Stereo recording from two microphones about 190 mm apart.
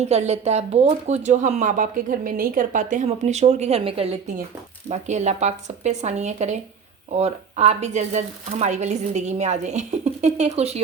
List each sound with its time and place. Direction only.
0.0 s speech: 35° right (ahead or behind)